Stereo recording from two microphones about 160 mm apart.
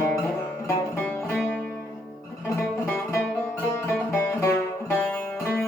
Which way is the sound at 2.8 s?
15° left (ahead or behind).